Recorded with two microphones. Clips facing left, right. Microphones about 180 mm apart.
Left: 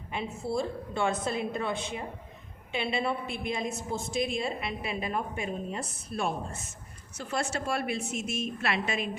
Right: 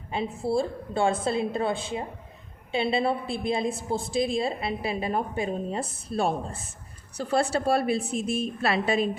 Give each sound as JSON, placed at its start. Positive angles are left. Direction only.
{"t": 0.1, "sound": "a woman's voice", "side_deg": -30}